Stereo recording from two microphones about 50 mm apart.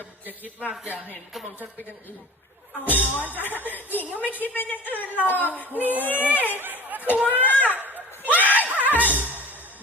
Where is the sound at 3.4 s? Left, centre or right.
Left.